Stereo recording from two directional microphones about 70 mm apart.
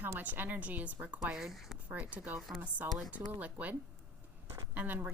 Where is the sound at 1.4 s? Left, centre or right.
Centre.